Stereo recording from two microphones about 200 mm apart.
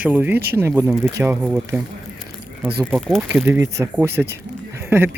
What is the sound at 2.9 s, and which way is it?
Speech, centre (ahead or behind).